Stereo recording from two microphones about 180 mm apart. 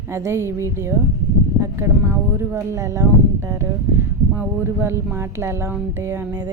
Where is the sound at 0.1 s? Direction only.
15° right (ahead or behind).